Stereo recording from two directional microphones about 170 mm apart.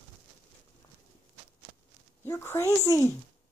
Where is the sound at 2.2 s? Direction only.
15° left (ahead or behind).